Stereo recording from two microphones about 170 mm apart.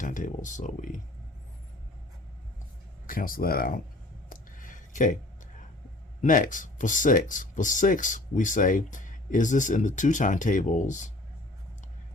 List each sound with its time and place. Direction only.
0.0 s speech: 50° left (ahead or behind)
3.1 s speech: 55° left (ahead or behind)
4.3 s a sound: 50° left (ahead or behind)
6.2 s speech: 50° left (ahead or behind)